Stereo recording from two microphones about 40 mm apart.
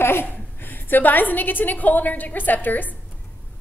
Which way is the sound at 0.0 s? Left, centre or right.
Left.